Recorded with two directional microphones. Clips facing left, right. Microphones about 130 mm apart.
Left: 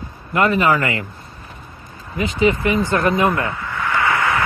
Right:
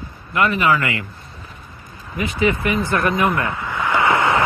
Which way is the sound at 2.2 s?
25° left (ahead or behind).